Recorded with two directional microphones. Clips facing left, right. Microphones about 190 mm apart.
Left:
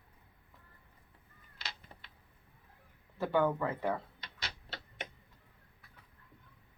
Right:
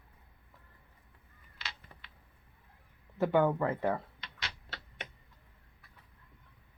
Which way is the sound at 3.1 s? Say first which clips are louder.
Right 3 dB; 20° right (ahead or behind).